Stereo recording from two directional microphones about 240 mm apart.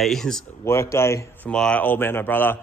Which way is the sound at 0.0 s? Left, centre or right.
Centre.